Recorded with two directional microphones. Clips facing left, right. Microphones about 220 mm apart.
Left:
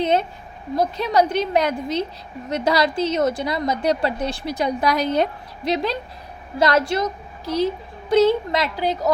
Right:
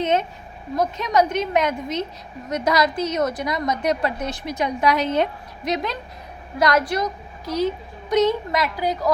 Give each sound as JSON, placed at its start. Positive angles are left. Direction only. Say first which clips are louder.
{"t": 0.0, "sound": "a sound", "louder": "left 1 dB", "side_deg": 35}
{"t": 0.8, "sound": "a woman's voice", "louder": "left 1 dB", "side_deg": 35}
{"t": 8.1, "sound": "a woman's voice", "louder": "left 3 dB", "side_deg": 30}